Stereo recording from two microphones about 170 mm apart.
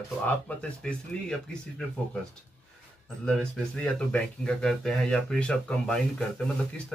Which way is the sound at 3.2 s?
5° left (ahead or behind).